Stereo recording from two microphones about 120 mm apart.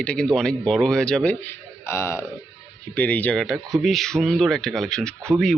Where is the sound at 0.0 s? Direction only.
10° left (ahead or behind).